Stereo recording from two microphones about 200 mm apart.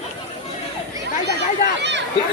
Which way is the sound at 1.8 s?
60° right (ahead or behind).